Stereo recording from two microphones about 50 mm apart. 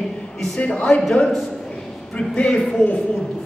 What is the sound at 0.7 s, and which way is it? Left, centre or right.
Speech, left.